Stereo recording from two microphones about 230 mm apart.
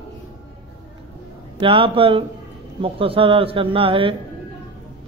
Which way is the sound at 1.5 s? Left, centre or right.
Right.